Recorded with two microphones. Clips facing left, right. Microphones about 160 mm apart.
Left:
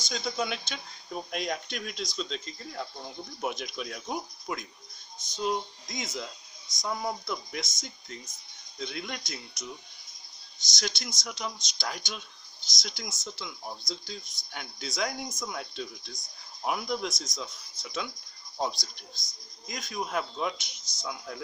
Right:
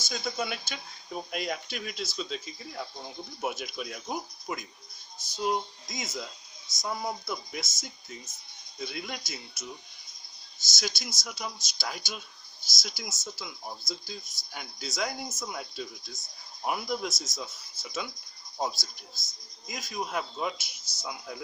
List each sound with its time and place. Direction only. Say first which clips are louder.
0.0 s speech: left 1 dB; 5° right (ahead or behind)
10.7 s speech: even; 5° right (ahead or behind)